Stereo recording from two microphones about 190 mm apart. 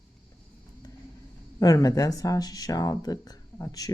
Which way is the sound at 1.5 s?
20° left (ahead or behind).